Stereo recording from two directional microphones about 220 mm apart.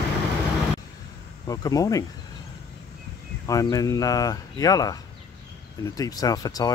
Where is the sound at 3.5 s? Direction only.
15° left (ahead or behind).